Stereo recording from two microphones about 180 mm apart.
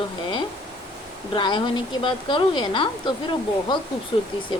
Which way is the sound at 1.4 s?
25° left (ahead or behind).